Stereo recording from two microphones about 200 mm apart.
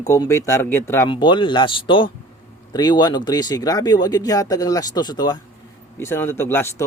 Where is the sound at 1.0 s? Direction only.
25° left (ahead or behind).